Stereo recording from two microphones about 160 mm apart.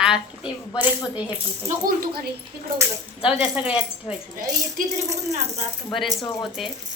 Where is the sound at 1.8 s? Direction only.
70° right (ahead or behind).